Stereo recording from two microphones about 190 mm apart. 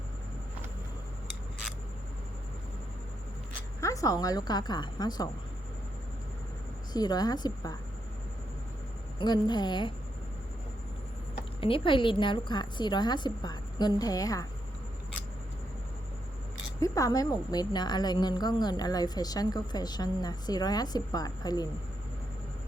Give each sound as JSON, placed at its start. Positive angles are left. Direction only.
{"t": 3.8, "sound": "a woman's voice", "side_deg": 15}
{"t": 6.9, "sound": "a woman's voice", "side_deg": 20}
{"t": 9.1, "sound": "a woman's voice", "side_deg": 25}
{"t": 11.6, "sound": "a woman's voice", "side_deg": 30}
{"t": 16.8, "sound": "a woman's voice", "side_deg": 15}